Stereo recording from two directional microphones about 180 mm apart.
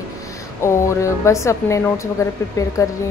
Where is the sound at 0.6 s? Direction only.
15° left (ahead or behind).